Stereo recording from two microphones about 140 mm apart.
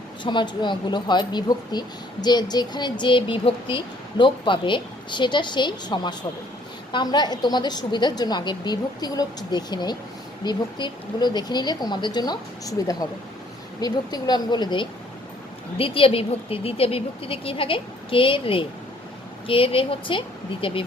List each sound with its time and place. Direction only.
0.2 s speech: 35° left (ahead or behind)